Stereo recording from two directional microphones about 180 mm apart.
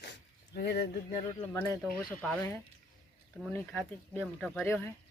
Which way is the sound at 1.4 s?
10° left (ahead or behind).